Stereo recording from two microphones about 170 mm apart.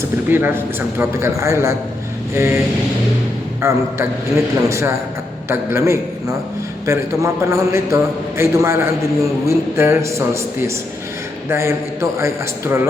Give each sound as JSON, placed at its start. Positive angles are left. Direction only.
{"t": 0.3, "sound": "a man's voice", "side_deg": -10}
{"t": 3.6, "sound": "a man's voice", "side_deg": -15}
{"t": 11.4, "sound": "a man's voice", "side_deg": -15}